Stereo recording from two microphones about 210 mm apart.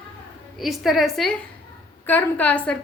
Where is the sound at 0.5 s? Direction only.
Centre (ahead or behind).